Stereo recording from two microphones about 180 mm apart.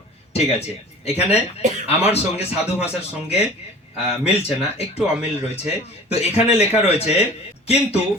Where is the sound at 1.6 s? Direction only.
40° right (ahead or behind).